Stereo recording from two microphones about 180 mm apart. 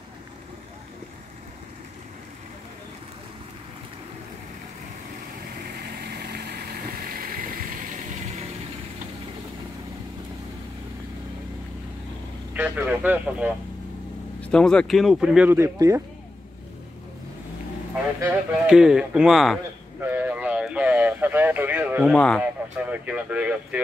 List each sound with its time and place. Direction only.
5.9 s vehicle: 60° right (ahead or behind)
12.5 s a man's voice: 10° right (ahead or behind)
14.4 s speech: 5° left (ahead or behind); by 16.0 s 15° right (ahead or behind)
18.2 s speech: 5° right (ahead or behind)
20.0 s a sound: 10° right (ahead or behind)
22.1 s speech: 5° left (ahead or behind)
22.4 s speech: 10° right (ahead or behind)